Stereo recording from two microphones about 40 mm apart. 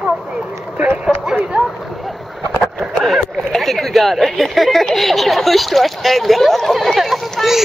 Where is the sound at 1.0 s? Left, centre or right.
Centre.